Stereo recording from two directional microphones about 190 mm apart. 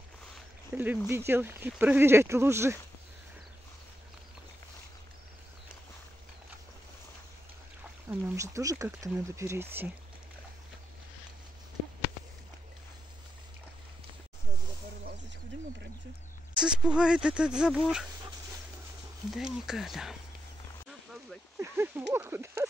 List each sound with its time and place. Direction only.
0.7 s speech: 10° right (ahead or behind)
8.1 s speech: 15° right (ahead or behind)
16.5 s speech: 5° right (ahead or behind)
19.3 s speech: centre (ahead or behind)
21.5 s a sound: 15° right (ahead or behind)
22.1 s speech: 10° right (ahead or behind)